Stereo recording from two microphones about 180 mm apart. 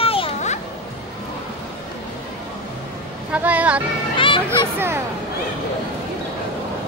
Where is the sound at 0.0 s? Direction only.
30° left (ahead or behind).